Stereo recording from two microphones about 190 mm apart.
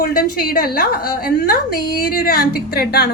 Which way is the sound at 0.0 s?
50° left (ahead or behind).